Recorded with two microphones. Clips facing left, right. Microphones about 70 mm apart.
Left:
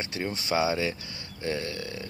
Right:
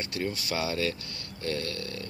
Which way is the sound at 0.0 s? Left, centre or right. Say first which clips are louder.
Even; left.